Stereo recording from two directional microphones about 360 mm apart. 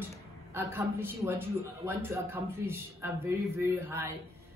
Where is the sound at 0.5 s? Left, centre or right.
Centre.